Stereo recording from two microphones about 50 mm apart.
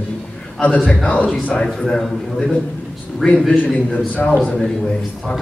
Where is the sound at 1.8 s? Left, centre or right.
Centre.